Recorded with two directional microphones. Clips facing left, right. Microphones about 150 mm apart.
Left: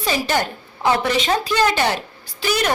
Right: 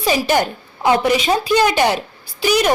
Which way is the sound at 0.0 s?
15° right (ahead or behind).